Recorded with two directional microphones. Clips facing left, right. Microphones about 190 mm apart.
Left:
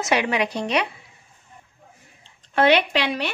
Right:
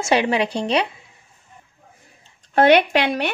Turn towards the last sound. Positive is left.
turn(degrees=-55)  # may be behind; listen again after turning